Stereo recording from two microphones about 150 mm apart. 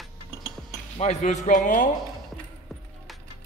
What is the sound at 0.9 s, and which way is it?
Speech, 50° left (ahead or behind).